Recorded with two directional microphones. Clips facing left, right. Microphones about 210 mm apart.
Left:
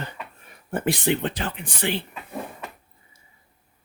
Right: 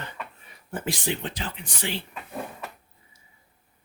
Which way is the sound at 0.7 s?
60° left (ahead or behind).